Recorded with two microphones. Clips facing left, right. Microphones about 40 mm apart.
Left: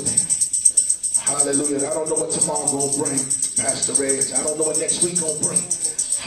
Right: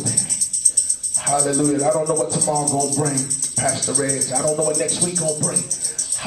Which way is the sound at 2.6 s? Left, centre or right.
Left.